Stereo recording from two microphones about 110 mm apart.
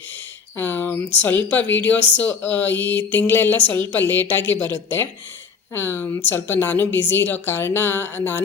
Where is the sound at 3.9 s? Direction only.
20° left (ahead or behind).